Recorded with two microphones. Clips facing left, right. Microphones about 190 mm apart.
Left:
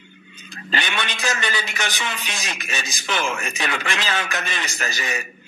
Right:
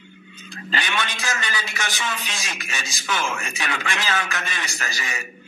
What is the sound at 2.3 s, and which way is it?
Speech, 20° left (ahead or behind).